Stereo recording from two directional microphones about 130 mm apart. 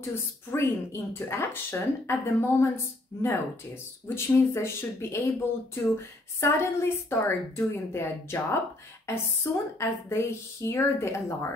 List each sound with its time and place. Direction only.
0.0 s speech: 20° left (ahead or behind)
6.4 s speech: 20° left (ahead or behind)